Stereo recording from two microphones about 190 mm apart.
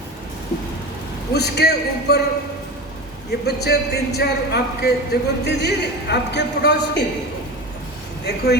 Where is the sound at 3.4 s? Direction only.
60° left (ahead or behind).